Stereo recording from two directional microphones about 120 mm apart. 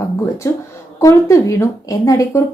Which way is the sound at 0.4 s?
25° left (ahead or behind).